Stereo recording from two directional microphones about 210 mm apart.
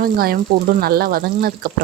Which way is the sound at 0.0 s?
45° right (ahead or behind).